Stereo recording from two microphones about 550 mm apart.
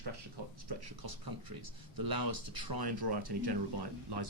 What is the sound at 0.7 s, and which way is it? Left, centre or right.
Speech, right.